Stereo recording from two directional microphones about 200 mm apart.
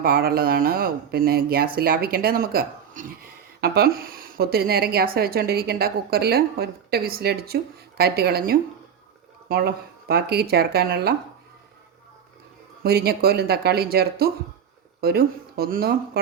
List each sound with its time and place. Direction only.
0.0 s speech: 50° right (ahead or behind)
12.8 s speech: 50° right (ahead or behind)